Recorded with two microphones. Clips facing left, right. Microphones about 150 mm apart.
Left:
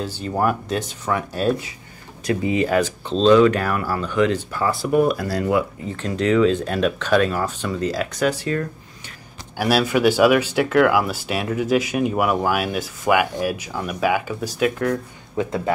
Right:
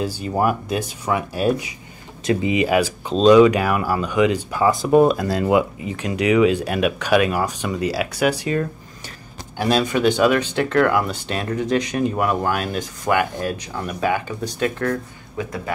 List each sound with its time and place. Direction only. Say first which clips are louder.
0.0 s speech: right 1 dB; 10° right (ahead or behind)
9.6 s speech: left 1 dB; 10° left (ahead or behind)
15.3 s speech: left 5 dB; 25° left (ahead or behind)